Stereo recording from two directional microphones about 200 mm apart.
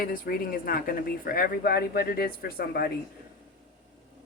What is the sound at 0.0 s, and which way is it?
Speech, 45° left (ahead or behind).